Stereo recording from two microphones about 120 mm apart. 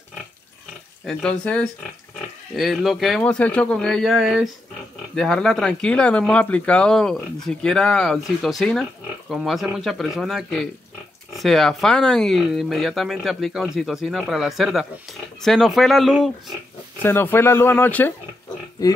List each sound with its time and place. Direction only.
1.0 s speech: 10° left (ahead or behind)
3.3 s speech: 10° left (ahead or behind)
17.0 s speech: 20° left (ahead or behind)